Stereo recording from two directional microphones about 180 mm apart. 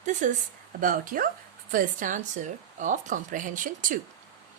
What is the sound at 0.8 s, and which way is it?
Speech, 50° right (ahead or behind).